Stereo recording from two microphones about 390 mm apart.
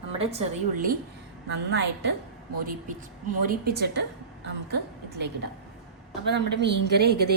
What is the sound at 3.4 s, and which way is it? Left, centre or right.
Speech, right.